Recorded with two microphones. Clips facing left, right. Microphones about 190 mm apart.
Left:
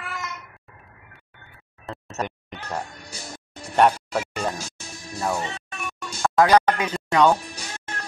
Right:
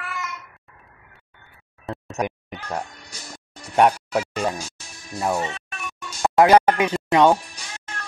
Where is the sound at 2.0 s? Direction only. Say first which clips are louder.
Right 3 dB; 15° right (ahead or behind).